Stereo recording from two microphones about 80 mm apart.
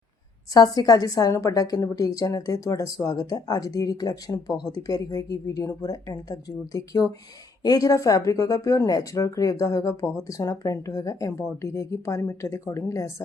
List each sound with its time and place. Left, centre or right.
0.5 s a woman's voice: left